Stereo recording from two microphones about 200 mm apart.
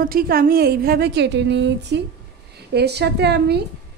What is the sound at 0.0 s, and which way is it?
A woman's voice, 50° right (ahead or behind).